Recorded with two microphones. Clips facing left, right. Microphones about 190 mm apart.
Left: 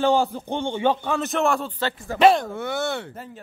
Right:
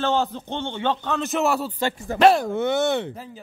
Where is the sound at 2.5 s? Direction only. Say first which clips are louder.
Right 5 dB; 20° right (ahead or behind).